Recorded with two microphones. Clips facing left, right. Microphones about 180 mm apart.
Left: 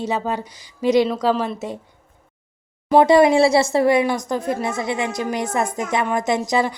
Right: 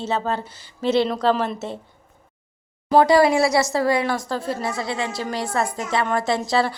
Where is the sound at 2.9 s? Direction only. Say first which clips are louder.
Left 2 dB; 20° left (ahead or behind).